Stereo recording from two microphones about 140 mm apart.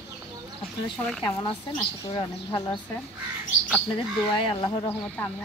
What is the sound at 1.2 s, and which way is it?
Speech, 30° left (ahead or behind).